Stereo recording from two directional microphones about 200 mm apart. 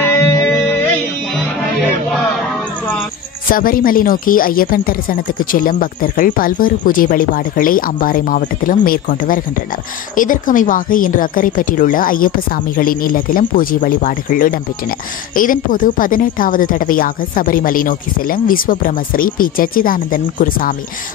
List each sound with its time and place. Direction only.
0.0 s music: 10° left (ahead or behind)
3.4 s speech: 45° left (ahead or behind)